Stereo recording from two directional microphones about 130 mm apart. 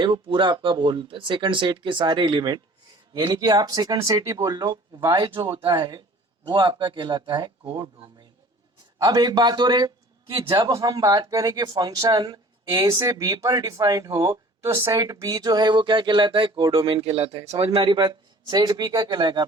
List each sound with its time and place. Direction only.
0.0 s speech: 40° right (ahead or behind)
9.0 s a man's voice: 30° right (ahead or behind)
15.0 s speech: 30° right (ahead or behind); by 17.3 s 45° right (ahead or behind)
17.7 s speech: 35° right (ahead or behind)